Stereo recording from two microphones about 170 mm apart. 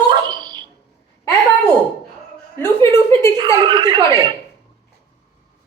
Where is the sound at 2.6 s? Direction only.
15° left (ahead or behind).